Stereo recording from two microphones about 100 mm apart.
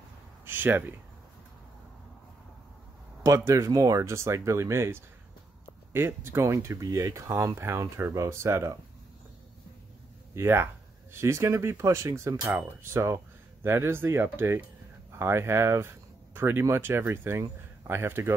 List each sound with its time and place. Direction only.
0.5 s speech: 20° right (ahead or behind)
3.3 s speech: 30° right (ahead or behind)
10.3 s speech: 25° right (ahead or behind)